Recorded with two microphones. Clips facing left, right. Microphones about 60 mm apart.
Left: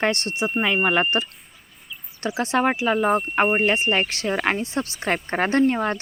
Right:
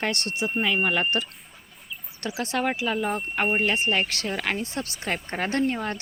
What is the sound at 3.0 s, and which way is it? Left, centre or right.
Speech, left.